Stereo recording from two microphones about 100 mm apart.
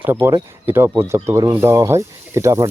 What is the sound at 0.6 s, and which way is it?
Speech, 20° right (ahead or behind).